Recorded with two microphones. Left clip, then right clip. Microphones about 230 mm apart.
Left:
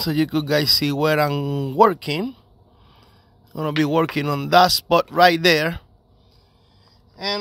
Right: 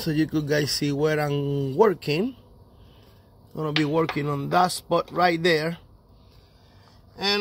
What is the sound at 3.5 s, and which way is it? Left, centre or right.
Speech, left.